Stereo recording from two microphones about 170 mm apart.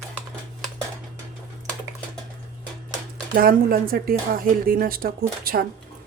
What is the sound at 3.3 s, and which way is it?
A woman's voice, 60° right (ahead or behind).